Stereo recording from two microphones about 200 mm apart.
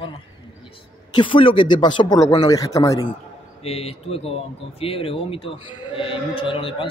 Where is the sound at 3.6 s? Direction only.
30° left (ahead or behind).